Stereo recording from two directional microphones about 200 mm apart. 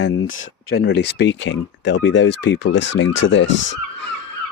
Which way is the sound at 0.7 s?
55° left (ahead or behind).